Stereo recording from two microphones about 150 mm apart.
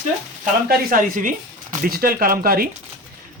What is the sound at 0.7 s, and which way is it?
Speech, 65° right (ahead or behind).